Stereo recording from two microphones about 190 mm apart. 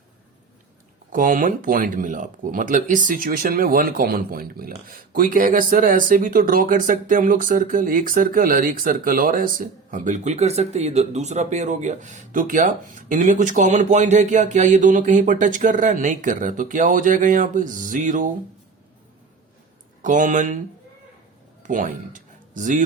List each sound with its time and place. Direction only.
1.1 s speech: 45° right (ahead or behind)
20.0 s speech: 45° right (ahead or behind)
21.6 s a sound: 45° right (ahead or behind)